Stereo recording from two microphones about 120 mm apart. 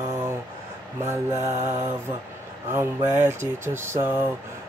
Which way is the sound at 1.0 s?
20° right (ahead or behind).